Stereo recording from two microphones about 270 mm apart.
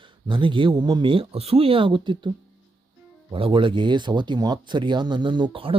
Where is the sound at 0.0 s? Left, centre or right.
Centre.